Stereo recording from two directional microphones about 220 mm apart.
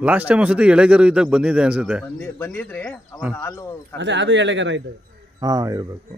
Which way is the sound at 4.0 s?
55° right (ahead or behind).